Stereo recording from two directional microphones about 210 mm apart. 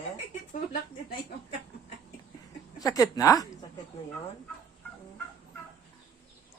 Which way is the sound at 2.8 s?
15° left (ahead or behind).